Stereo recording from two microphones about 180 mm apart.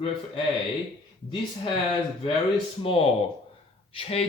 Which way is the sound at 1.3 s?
30° left (ahead or behind).